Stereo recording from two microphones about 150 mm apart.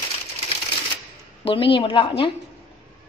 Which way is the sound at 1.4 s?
35° left (ahead or behind).